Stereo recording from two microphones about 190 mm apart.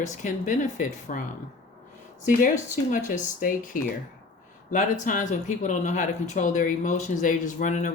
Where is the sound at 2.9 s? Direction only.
45° left (ahead or behind).